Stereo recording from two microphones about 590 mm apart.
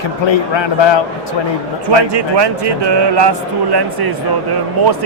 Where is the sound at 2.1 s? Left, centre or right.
Right.